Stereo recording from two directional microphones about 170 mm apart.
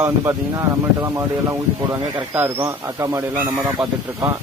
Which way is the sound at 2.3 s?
15° right (ahead or behind).